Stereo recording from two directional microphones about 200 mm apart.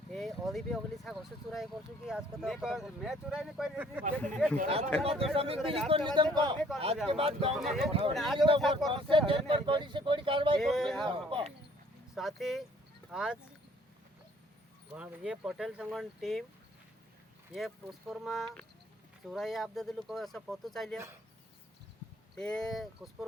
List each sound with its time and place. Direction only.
0.1 s a sound: centre (ahead or behind)
1.0 s speech: centre (ahead or behind)
4.5 s speech: 35° right (ahead or behind)
7.5 s speech: centre (ahead or behind)
7.9 s speech: 30° right (ahead or behind)
8.1 s speech: centre (ahead or behind)
8.9 s speech: 25° right (ahead or behind)
10.6 s speech: centre (ahead or behind)
11.0 s speech: 25° right (ahead or behind)
12.1 s speech: centre (ahead or behind)
14.9 s speech: 5° right (ahead or behind)
17.5 s speech: centre (ahead or behind)
22.4 s speech: 5° left (ahead or behind)